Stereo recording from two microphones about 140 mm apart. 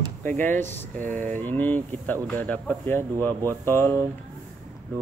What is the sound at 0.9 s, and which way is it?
Speech, 65° right (ahead or behind).